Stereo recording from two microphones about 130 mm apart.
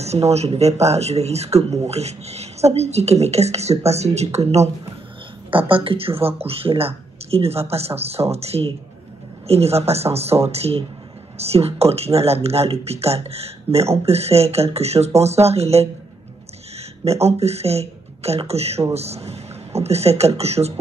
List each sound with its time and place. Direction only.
0.0 s speech: 55° right (ahead or behind)
5.5 s speech: 40° right (ahead or behind)